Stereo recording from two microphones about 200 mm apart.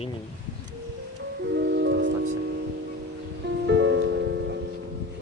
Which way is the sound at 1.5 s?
60° right (ahead or behind).